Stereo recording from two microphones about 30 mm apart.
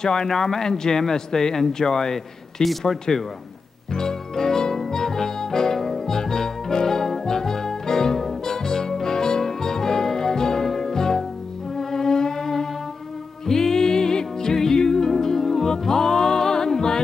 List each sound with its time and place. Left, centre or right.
0.0 s speech: left
3.9 s music: centre